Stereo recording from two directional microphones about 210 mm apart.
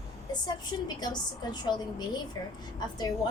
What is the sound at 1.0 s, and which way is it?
A woman's voice, 20° left (ahead or behind).